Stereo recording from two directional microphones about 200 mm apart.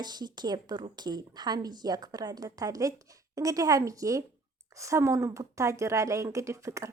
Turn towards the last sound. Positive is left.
turn(degrees=-15)  # may be behind; listen again after turning